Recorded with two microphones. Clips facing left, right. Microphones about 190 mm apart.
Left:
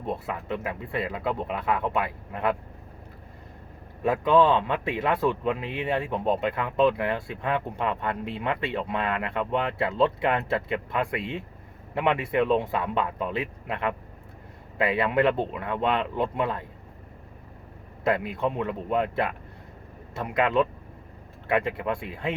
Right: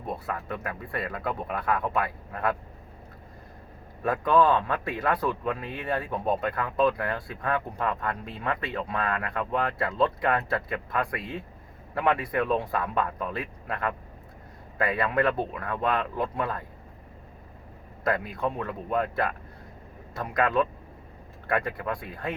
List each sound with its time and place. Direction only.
0.0 s speech: 25° left (ahead or behind)
4.0 s speech: 20° left (ahead or behind)
18.0 s speech: 25° left (ahead or behind)